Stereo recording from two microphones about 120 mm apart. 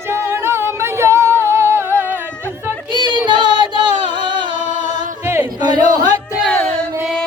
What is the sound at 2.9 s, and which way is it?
Child singing, 40° right (ahead or behind).